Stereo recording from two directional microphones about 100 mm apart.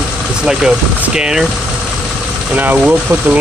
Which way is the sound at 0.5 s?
5° right (ahead or behind).